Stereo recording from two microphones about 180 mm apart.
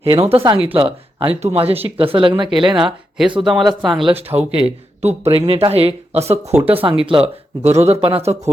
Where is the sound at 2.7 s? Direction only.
Centre (ahead or behind).